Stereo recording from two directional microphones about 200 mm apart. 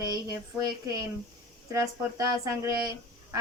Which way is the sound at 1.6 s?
15° right (ahead or behind).